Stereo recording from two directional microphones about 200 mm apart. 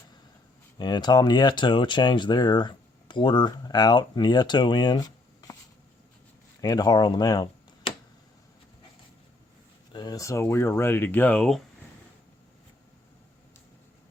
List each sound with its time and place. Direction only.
0.8 s speech: 20° left (ahead or behind)
6.6 s speech: 20° left (ahead or behind)
9.9 s speech: 20° left (ahead or behind); by 11.6 s 5° left (ahead or behind)